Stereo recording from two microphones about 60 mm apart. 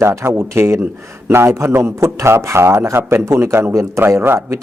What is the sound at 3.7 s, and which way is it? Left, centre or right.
Speech, right.